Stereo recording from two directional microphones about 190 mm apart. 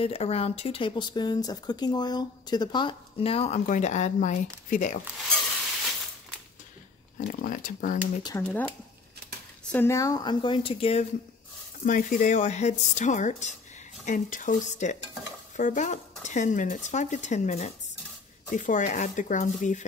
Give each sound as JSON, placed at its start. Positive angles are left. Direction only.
{"t": 0.0, "sound": "speech", "side_deg": 30}
{"t": 7.2, "sound": "speech", "side_deg": 45}
{"t": 8.2, "sound": "speech", "side_deg": 20}
{"t": 9.7, "sound": "speech", "side_deg": 10}
{"t": 11.8, "sound": "speech", "side_deg": 45}